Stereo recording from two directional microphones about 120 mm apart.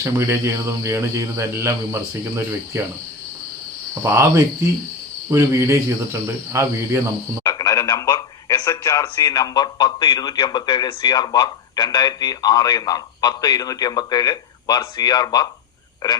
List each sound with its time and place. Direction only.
0.0 s speech: 20° right (ahead or behind)
4.0 s speech: 20° right (ahead or behind)
7.6 s radio: 25° left (ahead or behind)
8.6 s a man's voice: 25° left (ahead or behind)